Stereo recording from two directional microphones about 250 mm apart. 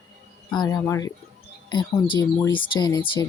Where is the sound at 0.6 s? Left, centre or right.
Centre.